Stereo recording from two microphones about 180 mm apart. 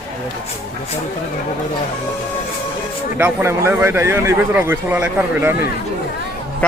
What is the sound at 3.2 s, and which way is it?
A man's voice, 15° right (ahead or behind).